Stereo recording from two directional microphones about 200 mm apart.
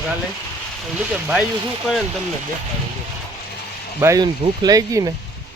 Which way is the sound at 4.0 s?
15° right (ahead or behind).